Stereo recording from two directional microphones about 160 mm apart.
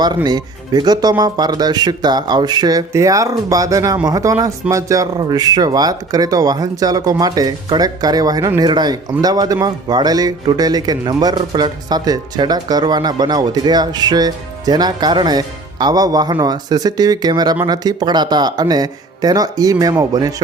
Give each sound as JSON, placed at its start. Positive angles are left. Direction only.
{"t": 0.3, "sound": "speech", "side_deg": -25}